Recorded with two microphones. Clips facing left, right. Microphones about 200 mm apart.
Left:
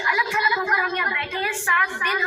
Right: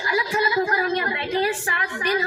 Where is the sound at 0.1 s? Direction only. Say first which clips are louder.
Right 4 dB; 35° right (ahead or behind).